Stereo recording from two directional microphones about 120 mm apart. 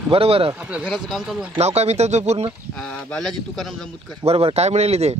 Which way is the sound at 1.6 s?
65° right (ahead or behind).